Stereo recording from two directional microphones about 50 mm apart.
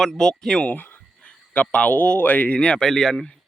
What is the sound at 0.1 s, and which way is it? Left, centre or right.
Speech, centre.